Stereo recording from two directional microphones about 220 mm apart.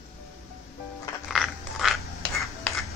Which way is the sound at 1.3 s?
Centre (ahead or behind).